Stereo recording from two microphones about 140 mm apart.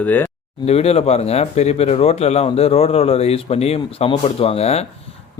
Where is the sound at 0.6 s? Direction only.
45° left (ahead or behind).